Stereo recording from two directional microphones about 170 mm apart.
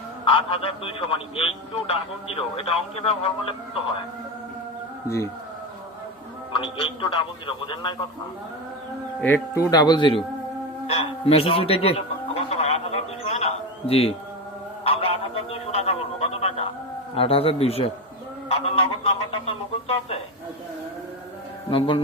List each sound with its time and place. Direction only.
0.3 s speech: 35° left (ahead or behind)
5.0 s speech: 15° left (ahead or behind)
6.5 s speech: 30° left (ahead or behind)
9.2 s speech: 15° left (ahead or behind)
10.8 s a sound: 35° left (ahead or behind)
15.5 s a sound: 40° left (ahead or behind)
17.2 s speech: 35° left (ahead or behind)
21.7 s speech: 30° left (ahead or behind)